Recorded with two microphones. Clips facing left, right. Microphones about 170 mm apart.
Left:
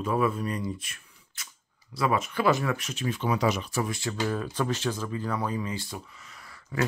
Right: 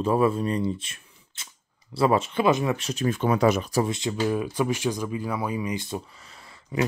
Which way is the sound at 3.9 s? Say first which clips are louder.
Right 4 dB; 20° right (ahead or behind).